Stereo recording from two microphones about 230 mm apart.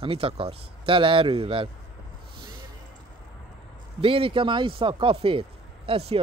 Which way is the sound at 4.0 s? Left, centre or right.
Right.